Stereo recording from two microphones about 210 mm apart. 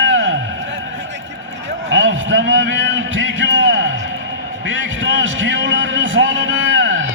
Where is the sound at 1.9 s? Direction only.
60° right (ahead or behind).